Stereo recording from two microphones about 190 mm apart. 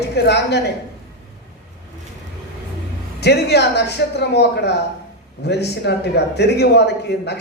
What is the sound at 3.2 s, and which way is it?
A man's voice, 60° left (ahead or behind).